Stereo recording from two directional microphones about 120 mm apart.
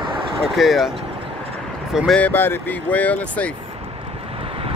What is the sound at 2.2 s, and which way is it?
Speech, 15° left (ahead or behind).